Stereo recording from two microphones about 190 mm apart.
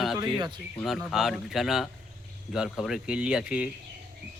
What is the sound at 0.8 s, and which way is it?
Speech, centre (ahead or behind).